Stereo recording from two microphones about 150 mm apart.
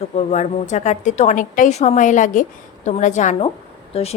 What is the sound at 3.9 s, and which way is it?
Speech, 40° left (ahead or behind).